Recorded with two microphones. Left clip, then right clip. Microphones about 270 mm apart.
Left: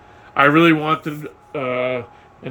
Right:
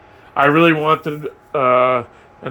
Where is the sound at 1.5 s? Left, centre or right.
Centre.